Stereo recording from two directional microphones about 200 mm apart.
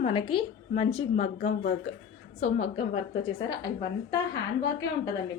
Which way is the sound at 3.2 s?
25° left (ahead or behind).